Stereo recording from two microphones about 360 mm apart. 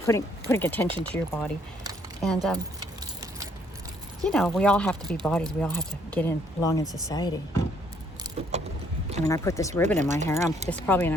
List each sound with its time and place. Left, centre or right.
0.0 s speech: centre
4.2 s speech: centre
9.2 s speech: centre
10.0 s speech: centre
10.2 s speech: centre